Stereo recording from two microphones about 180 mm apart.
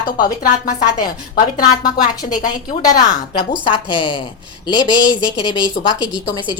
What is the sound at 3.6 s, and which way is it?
Speech, 25° left (ahead or behind).